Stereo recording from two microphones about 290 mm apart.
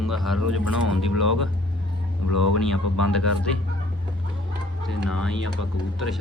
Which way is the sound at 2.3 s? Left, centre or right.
Left.